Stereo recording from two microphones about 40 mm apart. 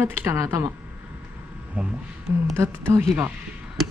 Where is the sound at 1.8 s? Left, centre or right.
Right.